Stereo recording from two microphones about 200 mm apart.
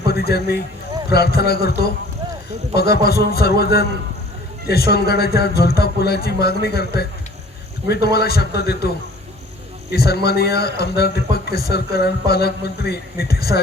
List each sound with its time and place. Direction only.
0.1 s a man's voice: 50° left (ahead or behind)
9.9 s a man's voice: 55° left (ahead or behind)